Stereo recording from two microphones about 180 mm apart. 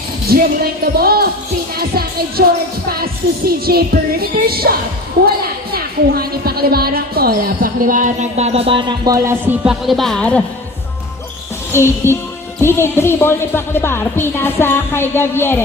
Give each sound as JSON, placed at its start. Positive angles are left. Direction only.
{"t": 0.3, "sound": "music", "side_deg": -60}
{"t": 2.9, "sound": "music", "side_deg": -60}
{"t": 5.7, "sound": "speech", "side_deg": -60}
{"t": 9.8, "sound": "speech", "side_deg": 0}
{"t": 11.7, "sound": "speech", "side_deg": 15}